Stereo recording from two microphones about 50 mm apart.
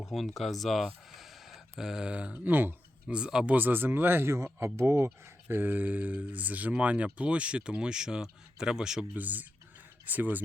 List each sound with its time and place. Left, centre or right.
0.1 s speech: centre
1.1 s a sound: centre
2.0 s speech: right
2.3 s speech: right
3.1 s speech: centre
3.5 s speech: right
4.4 s speech: right
5.5 s speech: right; by 9.0 s centre
9.1 s speech: right